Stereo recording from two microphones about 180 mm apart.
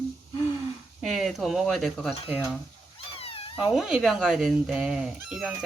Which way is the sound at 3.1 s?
30° left (ahead or behind).